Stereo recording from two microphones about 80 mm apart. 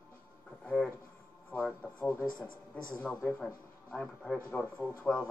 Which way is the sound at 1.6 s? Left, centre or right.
Centre.